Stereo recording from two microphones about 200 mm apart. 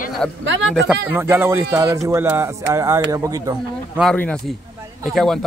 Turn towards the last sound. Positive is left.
turn(degrees=0)  # may be behind; listen again after turning